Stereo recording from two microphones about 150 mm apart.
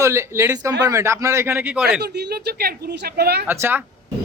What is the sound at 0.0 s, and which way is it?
Speech, 20° right (ahead or behind).